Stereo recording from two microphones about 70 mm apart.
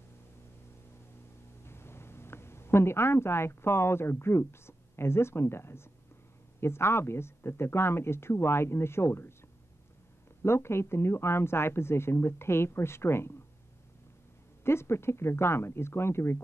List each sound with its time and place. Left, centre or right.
1.6 s speech: left
10.4 s speech: left
14.6 s speech: left